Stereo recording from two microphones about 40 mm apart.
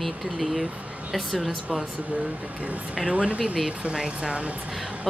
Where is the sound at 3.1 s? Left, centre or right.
Right.